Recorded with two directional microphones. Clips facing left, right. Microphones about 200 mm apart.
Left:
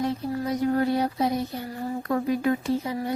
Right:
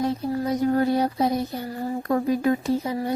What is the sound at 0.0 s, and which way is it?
Speech, 35° right (ahead or behind).